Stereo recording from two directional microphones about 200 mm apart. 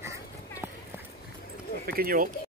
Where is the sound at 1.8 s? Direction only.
50° right (ahead or behind).